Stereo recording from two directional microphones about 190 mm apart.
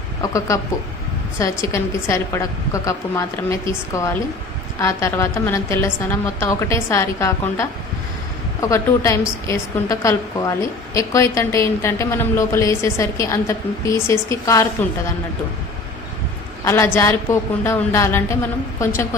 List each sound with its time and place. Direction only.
0.2 s a woman's voice: 15° left (ahead or behind)
16.6 s a woman's voice: 15° left (ahead or behind)